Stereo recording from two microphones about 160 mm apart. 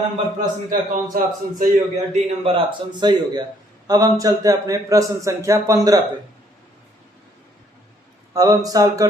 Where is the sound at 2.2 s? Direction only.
35° right (ahead or behind).